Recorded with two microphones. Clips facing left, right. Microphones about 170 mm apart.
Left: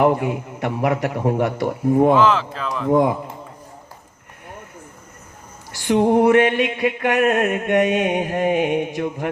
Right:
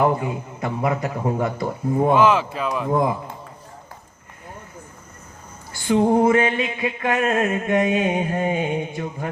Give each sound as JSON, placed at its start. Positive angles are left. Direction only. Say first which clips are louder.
{"t": 0.0, "sound": "music", "louder": "left 3 dB", "side_deg": 70}
{"t": 1.8, "sound": "speech", "louder": "left 5 dB", "side_deg": 5}
{"t": 2.1, "sound": "speech", "louder": "even", "side_deg": -10}
{"t": 5.7, "sound": "a woman's voice", "louder": "left 1 dB", "side_deg": 80}
{"t": 6.1, "sound": "music", "louder": "left 4 dB", "side_deg": 75}